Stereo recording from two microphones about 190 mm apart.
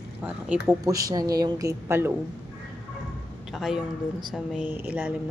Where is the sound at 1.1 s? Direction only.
20° right (ahead or behind).